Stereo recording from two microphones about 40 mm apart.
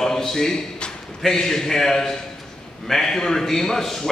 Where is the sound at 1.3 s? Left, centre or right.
Centre.